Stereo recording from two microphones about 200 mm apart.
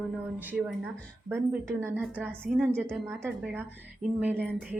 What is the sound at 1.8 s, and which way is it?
Speech, 10° right (ahead or behind).